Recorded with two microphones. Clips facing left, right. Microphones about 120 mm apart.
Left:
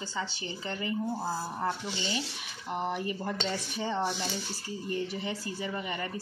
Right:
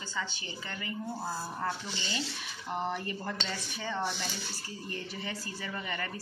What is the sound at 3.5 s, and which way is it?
A woman's voice, 25° left (ahead or behind).